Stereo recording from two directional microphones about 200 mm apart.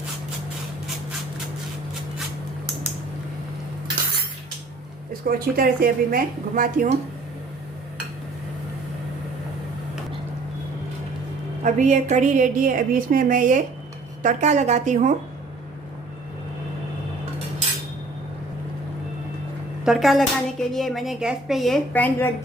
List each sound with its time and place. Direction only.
5.2 s a woman's voice: 45° right (ahead or behind)
11.6 s a woman's voice: 35° right (ahead or behind)
19.8 s speech: centre (ahead or behind)